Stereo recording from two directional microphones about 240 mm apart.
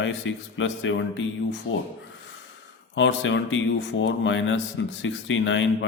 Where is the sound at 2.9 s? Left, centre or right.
Left.